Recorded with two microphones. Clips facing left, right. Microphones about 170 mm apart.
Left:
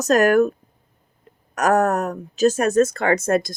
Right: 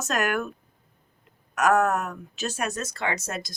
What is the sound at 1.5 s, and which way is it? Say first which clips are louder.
Speech: left 4 dB; 40° left (ahead or behind).